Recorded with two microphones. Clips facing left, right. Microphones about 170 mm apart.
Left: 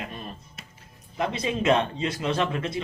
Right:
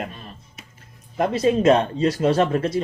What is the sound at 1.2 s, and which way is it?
Speech, 45° right (ahead or behind).